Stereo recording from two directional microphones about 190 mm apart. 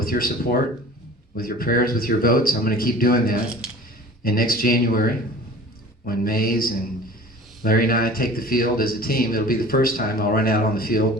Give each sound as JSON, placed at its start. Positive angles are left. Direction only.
{"t": 0.0, "sound": "a man's voice", "side_deg": 50}